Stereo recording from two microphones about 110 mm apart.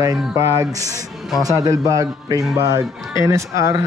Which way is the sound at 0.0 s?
25° right (ahead or behind).